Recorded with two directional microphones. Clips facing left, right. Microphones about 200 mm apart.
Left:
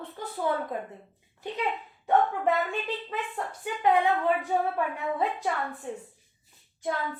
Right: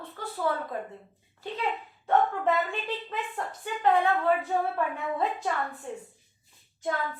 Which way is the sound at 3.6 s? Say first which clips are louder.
Even; 15° left (ahead or behind).